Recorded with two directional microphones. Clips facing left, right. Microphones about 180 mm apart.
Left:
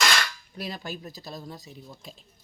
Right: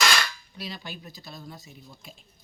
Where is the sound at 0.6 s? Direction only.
45° left (ahead or behind).